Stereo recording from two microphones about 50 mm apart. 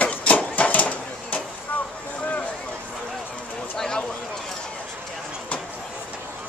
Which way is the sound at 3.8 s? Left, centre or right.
Centre.